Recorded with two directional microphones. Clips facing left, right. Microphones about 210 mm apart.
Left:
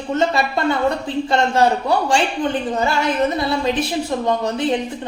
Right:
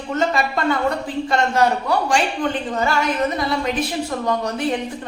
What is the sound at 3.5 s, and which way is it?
A woman's voice, 25° left (ahead or behind).